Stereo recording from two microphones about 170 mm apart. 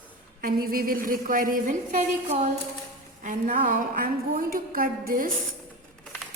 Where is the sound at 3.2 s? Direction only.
50° right (ahead or behind).